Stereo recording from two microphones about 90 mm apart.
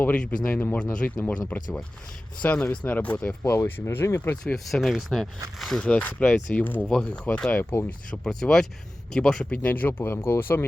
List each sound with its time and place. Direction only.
0.0 s speech: 20° left (ahead or behind)
3.4 s speech: 30° left (ahead or behind)
4.2 s speech: 15° left (ahead or behind)
4.5 s speech: centre (ahead or behind)
7.6 s speech: 25° left (ahead or behind)
8.1 s speech: 5° left (ahead or behind); by 10.7 s 25° left (ahead or behind)